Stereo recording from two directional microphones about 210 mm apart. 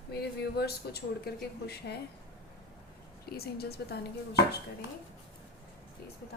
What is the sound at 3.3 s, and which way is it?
Speech, 50° left (ahead or behind).